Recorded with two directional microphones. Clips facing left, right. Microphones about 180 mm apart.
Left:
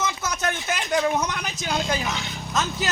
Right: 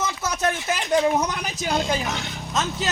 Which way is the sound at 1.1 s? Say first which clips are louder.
Right 2 dB; 30° right (ahead or behind).